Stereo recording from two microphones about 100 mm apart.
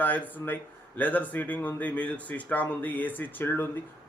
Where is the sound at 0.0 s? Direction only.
20° left (ahead or behind).